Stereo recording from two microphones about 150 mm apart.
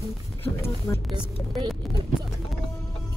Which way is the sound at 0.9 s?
15° left (ahead or behind).